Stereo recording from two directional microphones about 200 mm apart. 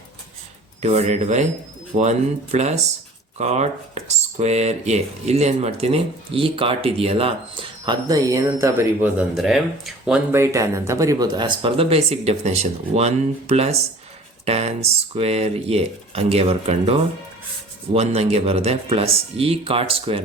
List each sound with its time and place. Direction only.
0.8 s speech: 35° right (ahead or behind)